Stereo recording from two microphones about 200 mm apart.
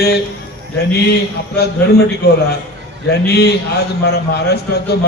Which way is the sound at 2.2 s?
55° left (ahead or behind).